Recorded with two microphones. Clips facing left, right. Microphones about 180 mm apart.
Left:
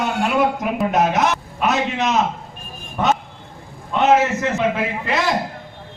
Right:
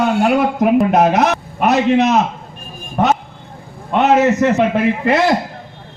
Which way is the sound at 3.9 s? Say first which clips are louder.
Right 3 dB; 65° right (ahead or behind).